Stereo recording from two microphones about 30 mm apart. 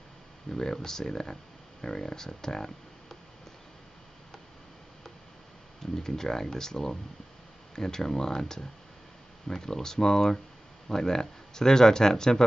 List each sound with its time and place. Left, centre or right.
0.5 s speech: centre
5.8 s speech: centre